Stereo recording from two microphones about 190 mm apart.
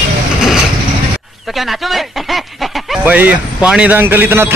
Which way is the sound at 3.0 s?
10° right (ahead or behind).